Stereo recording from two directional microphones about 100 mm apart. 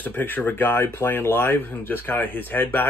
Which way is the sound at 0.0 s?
20° left (ahead or behind).